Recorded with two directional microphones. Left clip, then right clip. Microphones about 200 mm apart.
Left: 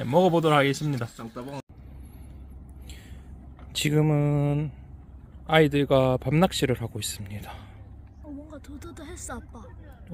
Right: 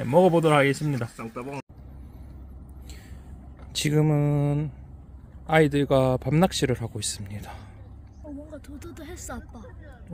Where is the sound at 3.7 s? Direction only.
Centre (ahead or behind).